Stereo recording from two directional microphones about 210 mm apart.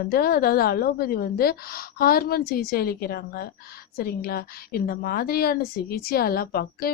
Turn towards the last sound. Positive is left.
turn(degrees=45)  # may be behind; listen again after turning